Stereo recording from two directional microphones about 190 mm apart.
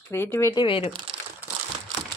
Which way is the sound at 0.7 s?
30° left (ahead or behind).